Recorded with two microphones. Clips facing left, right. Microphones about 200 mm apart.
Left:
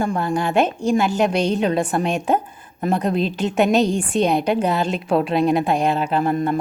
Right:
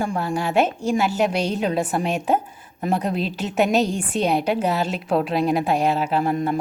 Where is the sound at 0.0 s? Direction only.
10° right (ahead or behind).